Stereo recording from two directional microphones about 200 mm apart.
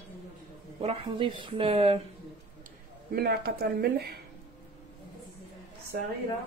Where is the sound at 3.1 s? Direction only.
50° right (ahead or behind).